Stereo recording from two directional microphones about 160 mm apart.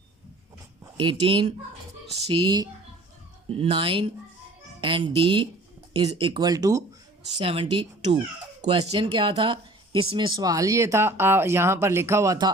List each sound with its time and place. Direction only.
0.9 s speech: 35° right (ahead or behind)
7.3 s speech: 35° right (ahead or behind)